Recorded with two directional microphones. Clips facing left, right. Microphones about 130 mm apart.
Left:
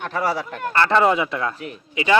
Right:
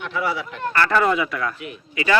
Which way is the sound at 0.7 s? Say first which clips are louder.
Left 2 dB; 25° left (ahead or behind).